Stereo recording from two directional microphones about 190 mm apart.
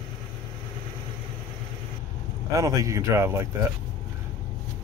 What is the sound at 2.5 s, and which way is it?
Speech, 15° right (ahead or behind).